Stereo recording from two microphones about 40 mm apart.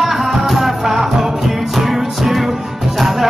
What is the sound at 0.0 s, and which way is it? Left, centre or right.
Music, centre.